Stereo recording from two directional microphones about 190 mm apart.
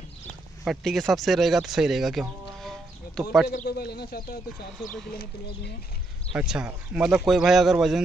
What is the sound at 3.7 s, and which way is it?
Speech, 55° left (ahead or behind).